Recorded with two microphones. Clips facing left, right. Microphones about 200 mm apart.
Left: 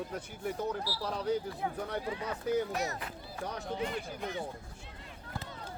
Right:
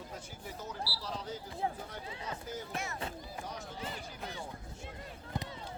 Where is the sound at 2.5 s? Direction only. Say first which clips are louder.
Left 12 dB; 65° left (ahead or behind).